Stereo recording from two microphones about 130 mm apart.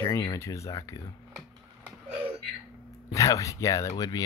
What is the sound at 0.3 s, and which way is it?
Speech, 25° left (ahead or behind).